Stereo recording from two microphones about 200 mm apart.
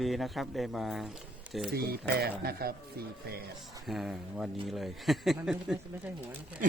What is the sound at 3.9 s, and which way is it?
A man's voice, centre (ahead or behind).